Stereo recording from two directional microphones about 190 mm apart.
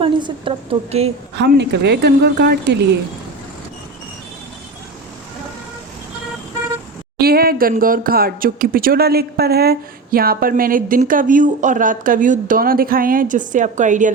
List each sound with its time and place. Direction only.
0.0 s a woman's voice: 25° right (ahead or behind)
1.4 s speech: 65° right (ahead or behind)
7.2 s a sound: 55° right (ahead or behind)
7.7 s speech: 45° right (ahead or behind)